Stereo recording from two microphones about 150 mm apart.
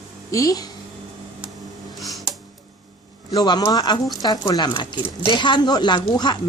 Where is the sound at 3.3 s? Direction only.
25° left (ahead or behind).